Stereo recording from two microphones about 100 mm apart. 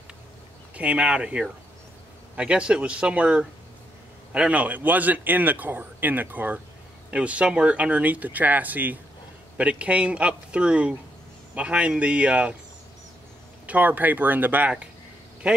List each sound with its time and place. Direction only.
0.7 s a man's voice: 15° right (ahead or behind)
13.7 s a man's voice: 15° right (ahead or behind)